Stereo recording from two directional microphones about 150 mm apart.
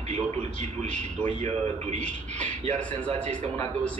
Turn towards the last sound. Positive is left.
turn(degrees=-50)  # may be behind; listen again after turning